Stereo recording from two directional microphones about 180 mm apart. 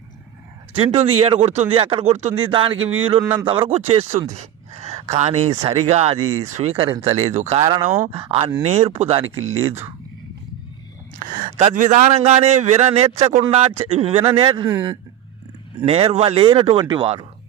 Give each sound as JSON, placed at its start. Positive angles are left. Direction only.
{"t": 0.8, "sound": "a man's voice", "side_deg": -30}
{"t": 11.2, "sound": "a man's voice", "side_deg": -45}
{"t": 15.9, "sound": "a man's voice", "side_deg": -35}